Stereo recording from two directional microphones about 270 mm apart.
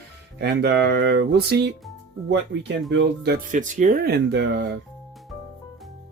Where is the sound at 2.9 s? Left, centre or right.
Right.